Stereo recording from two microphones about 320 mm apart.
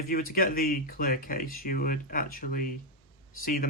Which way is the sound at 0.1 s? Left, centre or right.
Left.